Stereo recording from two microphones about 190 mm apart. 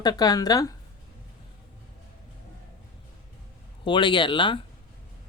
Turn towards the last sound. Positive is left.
turn(degrees=25)  # may be behind; listen again after turning